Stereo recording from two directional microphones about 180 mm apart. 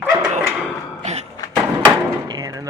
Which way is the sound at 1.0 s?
40° right (ahead or behind).